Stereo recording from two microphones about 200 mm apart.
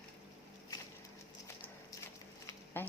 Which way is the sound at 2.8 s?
10° left (ahead or behind).